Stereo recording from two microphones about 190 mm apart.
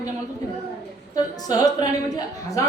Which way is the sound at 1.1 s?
20° left (ahead or behind).